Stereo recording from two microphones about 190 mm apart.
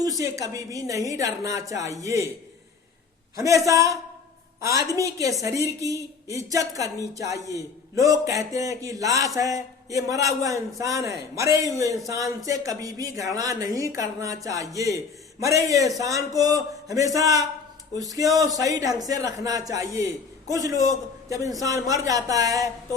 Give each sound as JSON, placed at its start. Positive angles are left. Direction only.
{"t": 0.0, "sound": "speech", "side_deg": -20}
{"t": 3.3, "sound": "a man's voice", "side_deg": -15}